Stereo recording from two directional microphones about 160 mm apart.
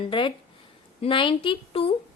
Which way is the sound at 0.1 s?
30° left (ahead or behind).